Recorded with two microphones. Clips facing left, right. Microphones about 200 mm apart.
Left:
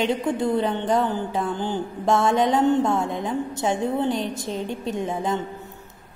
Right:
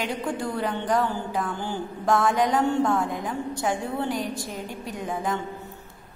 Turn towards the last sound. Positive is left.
turn(degrees=25)  # may be behind; listen again after turning